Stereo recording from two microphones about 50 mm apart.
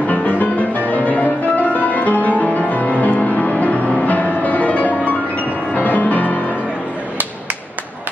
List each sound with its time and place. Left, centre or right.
0.1 s music: left